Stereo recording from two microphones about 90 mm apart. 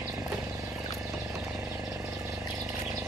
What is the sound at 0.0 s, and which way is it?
Vehicle, 35° right (ahead or behind).